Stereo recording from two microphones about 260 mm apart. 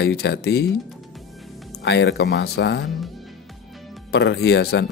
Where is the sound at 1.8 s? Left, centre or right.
Left.